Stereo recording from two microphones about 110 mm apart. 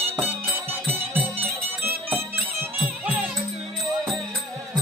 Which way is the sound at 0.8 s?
20° right (ahead or behind).